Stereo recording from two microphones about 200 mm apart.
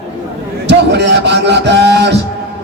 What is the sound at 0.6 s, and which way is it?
Music, 60° right (ahead or behind).